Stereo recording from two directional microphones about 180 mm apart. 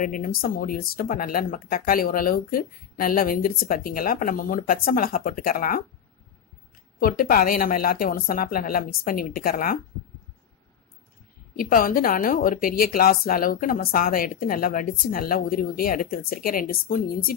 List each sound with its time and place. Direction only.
0.0 s speech: 50° left (ahead or behind)
7.0 s speech: 55° left (ahead or behind)
11.5 s speech: 50° left (ahead or behind)